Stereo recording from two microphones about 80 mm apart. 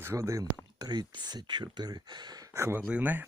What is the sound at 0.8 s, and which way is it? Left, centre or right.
Speech, right.